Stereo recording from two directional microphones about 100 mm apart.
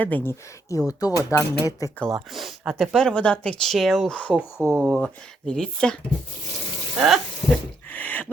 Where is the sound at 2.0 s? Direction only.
Centre (ahead or behind).